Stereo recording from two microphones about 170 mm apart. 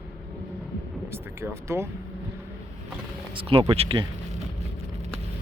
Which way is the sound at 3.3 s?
30° right (ahead or behind).